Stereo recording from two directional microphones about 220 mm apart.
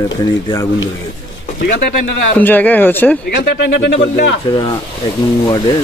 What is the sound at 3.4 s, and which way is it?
Speech, 50° left (ahead or behind).